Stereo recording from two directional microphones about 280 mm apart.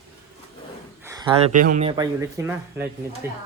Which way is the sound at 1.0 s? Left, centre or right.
Centre.